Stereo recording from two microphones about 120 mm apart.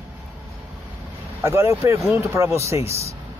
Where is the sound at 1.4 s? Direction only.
20° right (ahead or behind).